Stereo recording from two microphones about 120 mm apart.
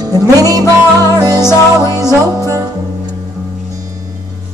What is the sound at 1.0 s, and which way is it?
Music, 30° right (ahead or behind).